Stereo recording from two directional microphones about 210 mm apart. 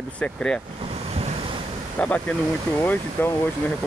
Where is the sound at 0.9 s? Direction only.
30° right (ahead or behind).